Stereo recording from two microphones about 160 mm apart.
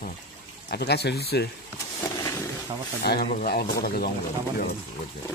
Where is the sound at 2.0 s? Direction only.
20° left (ahead or behind).